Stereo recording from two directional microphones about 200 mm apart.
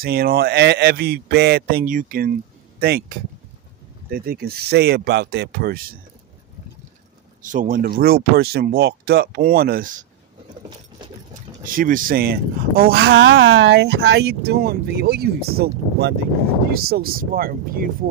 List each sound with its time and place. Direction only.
0.0 s speech: 50° right (ahead or behind)
7.4 s speech: 40° right (ahead or behind)
11.6 s speech: 45° right (ahead or behind)